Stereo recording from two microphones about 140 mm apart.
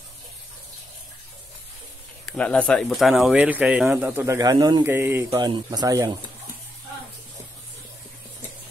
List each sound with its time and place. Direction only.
2.2 s speech: 10° left (ahead or behind); by 4.8 s 30° right (ahead or behind)
4.8 s speech: 15° right (ahead or behind)
5.3 s speech: 30° right (ahead or behind)